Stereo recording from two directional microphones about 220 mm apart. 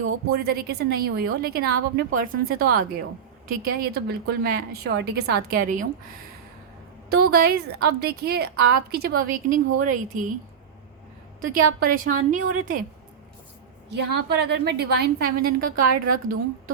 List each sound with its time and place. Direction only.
0.0 s a woman's voice: 45° right (ahead or behind)
7.3 s a woman's voice: 45° right (ahead or behind)
11.3 s a woman's voice: 40° right (ahead or behind)
13.9 s a woman's voice: 50° right (ahead or behind)